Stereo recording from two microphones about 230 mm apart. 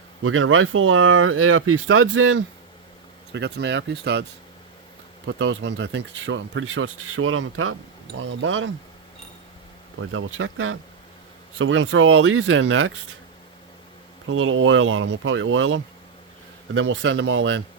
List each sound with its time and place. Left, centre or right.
0.2 s speech: right
3.3 s speech: right
10.0 s speech: right
11.5 s speech: right
14.3 s speech: right